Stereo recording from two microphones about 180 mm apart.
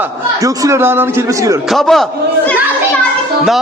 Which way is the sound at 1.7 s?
Centre (ahead or behind).